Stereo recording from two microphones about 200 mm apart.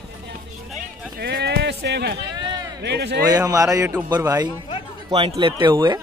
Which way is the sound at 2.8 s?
55° right (ahead or behind).